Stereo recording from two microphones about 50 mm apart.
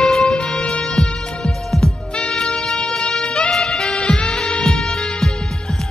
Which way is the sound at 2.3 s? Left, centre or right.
Centre.